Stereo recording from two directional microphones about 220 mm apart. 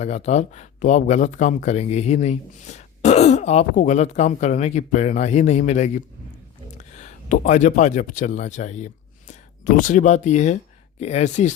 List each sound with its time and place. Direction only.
0.0 s speech: 30° left (ahead or behind)